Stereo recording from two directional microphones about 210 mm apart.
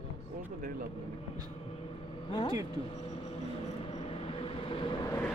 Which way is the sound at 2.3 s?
20° left (ahead or behind).